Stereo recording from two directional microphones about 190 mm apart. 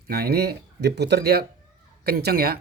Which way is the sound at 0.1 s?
55° right (ahead or behind).